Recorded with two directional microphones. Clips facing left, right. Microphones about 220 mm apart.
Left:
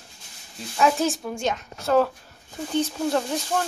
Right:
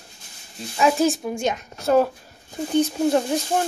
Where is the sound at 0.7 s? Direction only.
10° right (ahead or behind).